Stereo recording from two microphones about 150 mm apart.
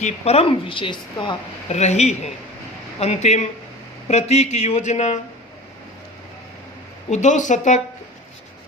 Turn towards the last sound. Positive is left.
turn(degrees=55)  # may be behind; listen again after turning